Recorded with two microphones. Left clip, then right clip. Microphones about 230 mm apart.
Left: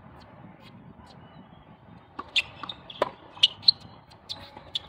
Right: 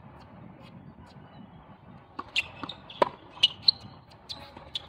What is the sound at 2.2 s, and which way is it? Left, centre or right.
Basketball bounce, centre.